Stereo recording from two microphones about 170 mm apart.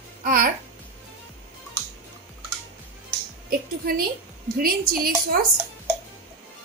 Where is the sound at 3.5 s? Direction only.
60° right (ahead or behind).